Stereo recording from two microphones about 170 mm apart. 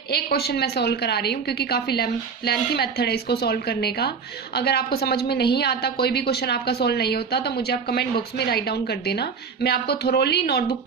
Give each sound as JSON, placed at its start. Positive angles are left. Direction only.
{"t": 0.1, "sound": "a woman's voice", "side_deg": 65}